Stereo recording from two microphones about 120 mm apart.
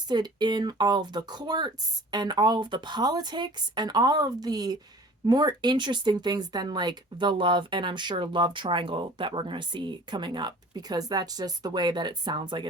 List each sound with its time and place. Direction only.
0.1 s speech: 35° right (ahead or behind)